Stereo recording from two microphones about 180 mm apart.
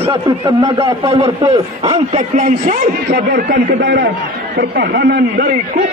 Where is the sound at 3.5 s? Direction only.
75° right (ahead or behind).